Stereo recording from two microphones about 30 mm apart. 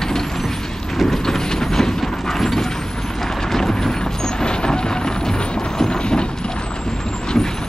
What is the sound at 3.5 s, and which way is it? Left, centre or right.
Vehicle, centre.